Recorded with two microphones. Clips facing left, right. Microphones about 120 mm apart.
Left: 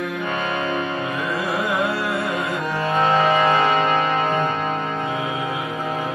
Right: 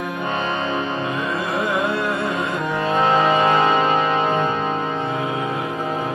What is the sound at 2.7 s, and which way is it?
Music, 20° right (ahead or behind).